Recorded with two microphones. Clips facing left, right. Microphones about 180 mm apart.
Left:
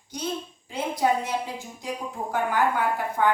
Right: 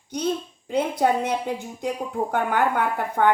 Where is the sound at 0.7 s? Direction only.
60° right (ahead or behind).